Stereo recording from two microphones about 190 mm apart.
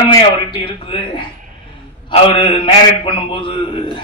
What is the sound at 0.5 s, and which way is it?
A man's voice, 25° left (ahead or behind).